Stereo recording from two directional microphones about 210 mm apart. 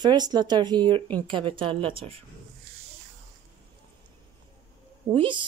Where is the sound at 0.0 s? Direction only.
20° right (ahead or behind).